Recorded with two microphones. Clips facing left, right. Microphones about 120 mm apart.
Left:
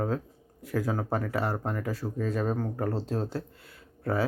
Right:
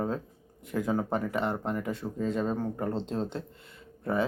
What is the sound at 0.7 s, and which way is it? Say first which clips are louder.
A man's voice: even; centre (ahead or behind).